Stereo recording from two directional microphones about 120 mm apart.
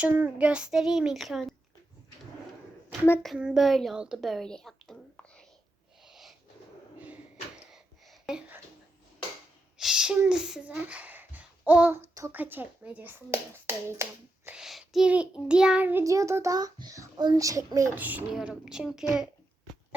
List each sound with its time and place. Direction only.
0.0 s a child's voice: 15° right (ahead or behind)
3.3 s a child's voice: 5° right (ahead or behind)
6.1 s wheeze: centre (ahead or behind)
7.7 s a sound: centre (ahead or behind)
9.7 s a sound: 5° right (ahead or behind)
10.2 s a child's voice: 5° right (ahead or behind)
14.5 s a child's voice: 5° right (ahead or behind)
16.0 s a child's voice: 25° right (ahead or behind)
17.9 s a child's voice: 15° right (ahead or behind)